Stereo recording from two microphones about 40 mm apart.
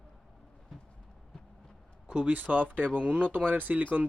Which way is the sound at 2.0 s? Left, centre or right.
Right.